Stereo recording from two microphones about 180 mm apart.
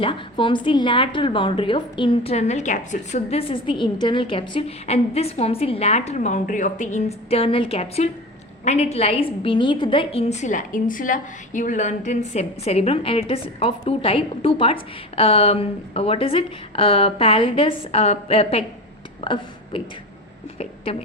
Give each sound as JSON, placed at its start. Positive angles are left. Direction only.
{"t": 0.0, "sound": "a woman's voice", "side_deg": 30}
{"t": 19.2, "sound": "a sound", "side_deg": 30}
{"t": 20.9, "sound": "a woman's voice", "side_deg": 30}